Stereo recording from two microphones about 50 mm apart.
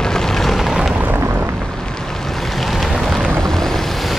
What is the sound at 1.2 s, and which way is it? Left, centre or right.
Vehicle, right.